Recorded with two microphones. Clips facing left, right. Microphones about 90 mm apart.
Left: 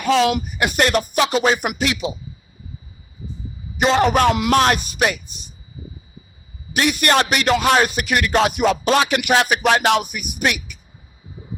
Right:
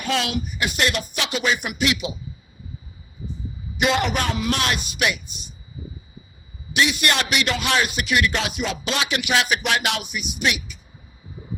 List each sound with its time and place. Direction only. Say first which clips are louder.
0.0 s speech: left 8 dB; 50° left (ahead or behind)
3.8 s speech: left 6 dB; 35° left (ahead or behind)
4.3 s speech: left 6 dB; 75° left (ahead or behind)
4.5 s speech: left 9 dB; 40° left (ahead or behind)
6.7 s speech: left 4 dB; 45° left (ahead or behind)